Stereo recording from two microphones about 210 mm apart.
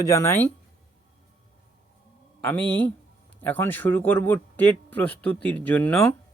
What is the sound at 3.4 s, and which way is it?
Speech, 10° left (ahead or behind).